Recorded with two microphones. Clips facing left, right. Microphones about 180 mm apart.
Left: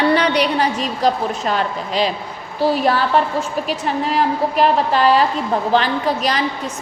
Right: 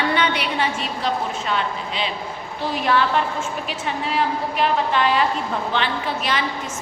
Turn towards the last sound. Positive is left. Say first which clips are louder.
# left 5 dB
turn(degrees=40)  # may be behind; listen again after turning